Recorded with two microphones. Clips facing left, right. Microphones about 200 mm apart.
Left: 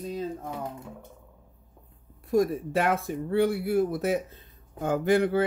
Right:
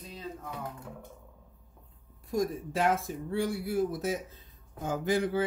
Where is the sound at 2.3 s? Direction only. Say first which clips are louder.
Left 7 dB; 60° left (ahead or behind).